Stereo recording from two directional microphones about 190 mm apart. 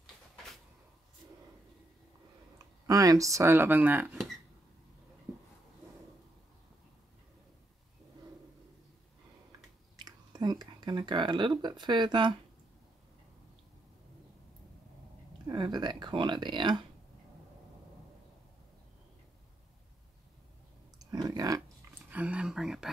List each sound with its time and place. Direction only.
2.9 s speech: 20° right (ahead or behind)
10.0 s speech: 20° right (ahead or behind)
15.4 s speech: 20° right (ahead or behind)
21.0 s clicking: 20° right (ahead or behind)
22.1 s a sound: 5° right (ahead or behind)